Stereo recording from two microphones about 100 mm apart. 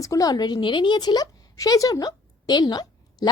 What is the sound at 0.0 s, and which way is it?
A woman's voice, 35° left (ahead or behind).